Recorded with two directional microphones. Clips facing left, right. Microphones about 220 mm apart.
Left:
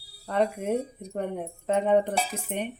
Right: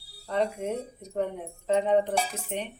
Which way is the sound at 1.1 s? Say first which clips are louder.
Right 1 dB; 55° left (ahead or behind).